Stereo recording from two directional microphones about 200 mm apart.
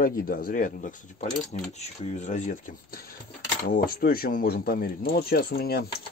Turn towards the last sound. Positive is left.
turn(degrees=50)  # may be behind; listen again after turning